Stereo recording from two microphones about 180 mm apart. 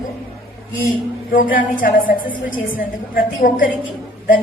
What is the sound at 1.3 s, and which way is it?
A woman's voice, 50° left (ahead or behind).